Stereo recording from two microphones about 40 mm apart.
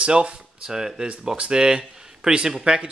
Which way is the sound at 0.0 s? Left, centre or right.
Right.